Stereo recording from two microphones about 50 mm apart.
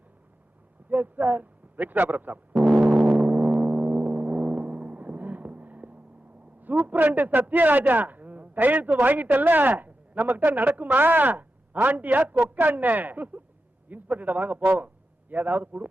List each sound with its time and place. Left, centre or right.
0.9 s speech: right
2.9 s gong: centre
3.2 s gong: right
6.6 s a man's voice: right